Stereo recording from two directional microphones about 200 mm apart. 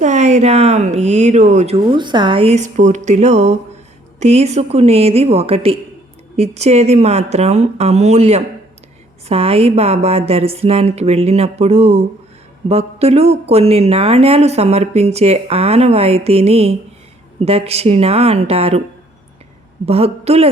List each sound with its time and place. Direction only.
0.0 s speech: 35° right (ahead or behind)
19.8 s a woman's voice: 30° right (ahead or behind)